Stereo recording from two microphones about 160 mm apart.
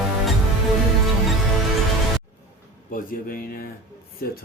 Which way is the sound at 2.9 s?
60° left (ahead or behind).